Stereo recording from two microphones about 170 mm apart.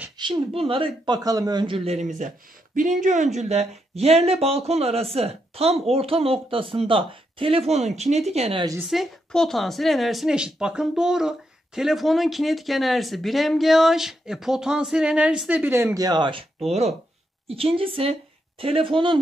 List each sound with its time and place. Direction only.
0.5 s speech: 35° right (ahead or behind)
8.8 s a woman's voice: centre (ahead or behind); by 19.1 s 30° right (ahead or behind)